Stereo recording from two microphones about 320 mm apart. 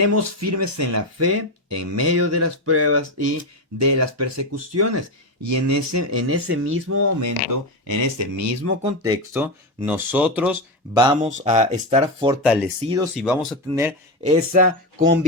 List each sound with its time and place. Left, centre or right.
0.0 s speech: right
7.9 s speech: right
8.8 s speech: centre
10.9 s speech: centre
12.4 s speech: centre
13.1 s speech: centre
14.5 s speech: right